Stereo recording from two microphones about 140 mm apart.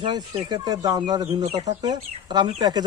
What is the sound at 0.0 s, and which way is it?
A man's voice, 30° right (ahead or behind).